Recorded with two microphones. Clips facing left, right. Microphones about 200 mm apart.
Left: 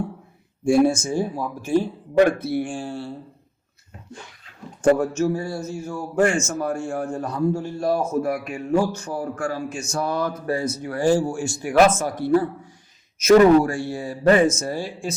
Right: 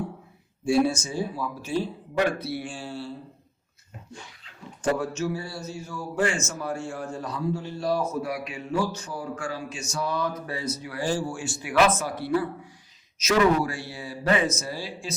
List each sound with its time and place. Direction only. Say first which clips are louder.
0.6 s a man's voice: left 5 dB; 50° left (ahead or behind)
4.8 s a man's voice: left 8 dB; 50° left (ahead or behind)